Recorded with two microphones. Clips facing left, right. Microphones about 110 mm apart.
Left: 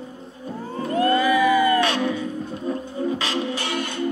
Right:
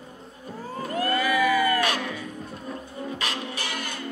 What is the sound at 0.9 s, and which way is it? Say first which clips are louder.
Music: left 6 dB; 25° left (ahead or behind).